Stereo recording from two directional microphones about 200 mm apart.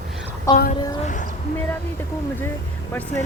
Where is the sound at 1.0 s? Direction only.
40° left (ahead or behind).